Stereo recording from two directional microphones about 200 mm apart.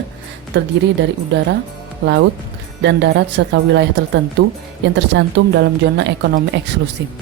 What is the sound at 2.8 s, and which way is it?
A woman's voice, 60° right (ahead or behind).